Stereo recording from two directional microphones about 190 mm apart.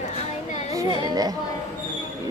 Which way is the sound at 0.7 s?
20° right (ahead or behind).